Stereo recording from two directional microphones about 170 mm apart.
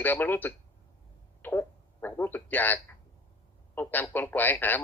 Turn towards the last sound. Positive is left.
turn(degrees=10)  # may be behind; listen again after turning